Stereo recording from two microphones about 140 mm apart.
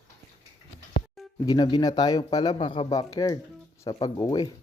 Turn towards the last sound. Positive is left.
turn(degrees=30)  # may be behind; listen again after turning